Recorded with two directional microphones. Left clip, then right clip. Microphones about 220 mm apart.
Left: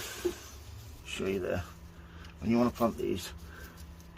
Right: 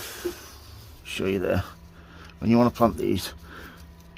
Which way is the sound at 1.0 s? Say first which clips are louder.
Right 8 dB; 50° right (ahead or behind).